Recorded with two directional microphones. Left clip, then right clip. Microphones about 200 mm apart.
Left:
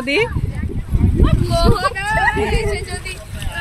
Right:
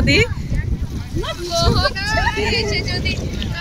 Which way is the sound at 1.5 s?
65° left (ahead or behind).